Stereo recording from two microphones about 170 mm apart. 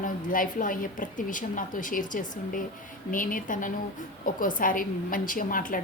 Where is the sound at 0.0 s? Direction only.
50° left (ahead or behind).